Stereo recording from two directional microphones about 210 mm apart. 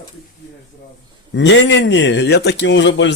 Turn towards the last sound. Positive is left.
turn(degrees=60)  # may be behind; listen again after turning